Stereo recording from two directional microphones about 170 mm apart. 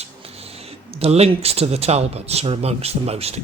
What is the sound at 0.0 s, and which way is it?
Speech, 35° right (ahead or behind).